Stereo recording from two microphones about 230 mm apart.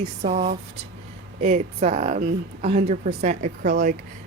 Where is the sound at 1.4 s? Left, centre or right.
Right.